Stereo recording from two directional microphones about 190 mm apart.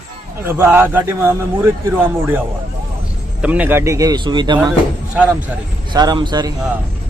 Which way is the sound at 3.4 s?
10° right (ahead or behind).